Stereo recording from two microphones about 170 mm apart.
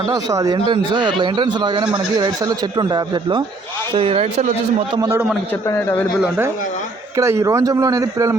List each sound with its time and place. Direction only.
0.1 s speech: 20° right (ahead or behind); by 4.4 s 35° right (ahead or behind)
5.0 s speech: 10° right (ahead or behind)
5.6 s a man's voice: 15° left (ahead or behind)
6.2 s speech: 10° right (ahead or behind)